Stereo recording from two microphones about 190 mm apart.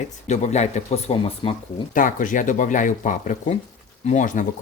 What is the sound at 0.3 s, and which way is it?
Speech, 35° left (ahead or behind).